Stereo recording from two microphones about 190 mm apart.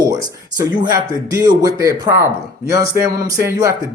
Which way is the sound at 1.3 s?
20° right (ahead or behind).